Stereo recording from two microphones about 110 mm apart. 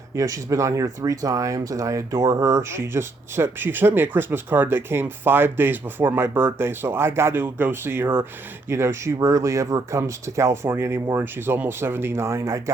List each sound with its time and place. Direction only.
0.2 s speech: 30° right (ahead or behind)